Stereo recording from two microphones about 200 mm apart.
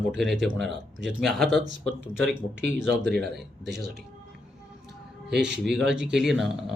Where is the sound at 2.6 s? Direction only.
60° right (ahead or behind).